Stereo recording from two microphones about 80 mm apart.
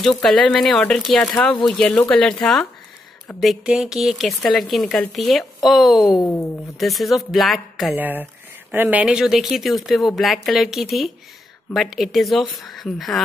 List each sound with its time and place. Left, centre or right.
0.0 s speech: centre
7.9 s speech: right
9.0 s speech: centre